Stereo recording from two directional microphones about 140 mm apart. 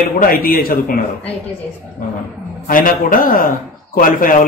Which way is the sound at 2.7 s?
80° left.